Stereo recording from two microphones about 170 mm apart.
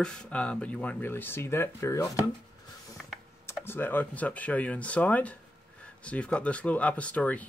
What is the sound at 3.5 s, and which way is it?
Speech, 10° left (ahead or behind).